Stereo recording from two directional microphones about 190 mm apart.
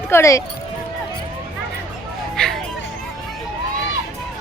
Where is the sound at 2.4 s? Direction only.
5° left (ahead or behind).